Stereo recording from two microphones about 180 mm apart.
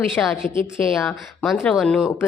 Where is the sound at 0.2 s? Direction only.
10° left (ahead or behind).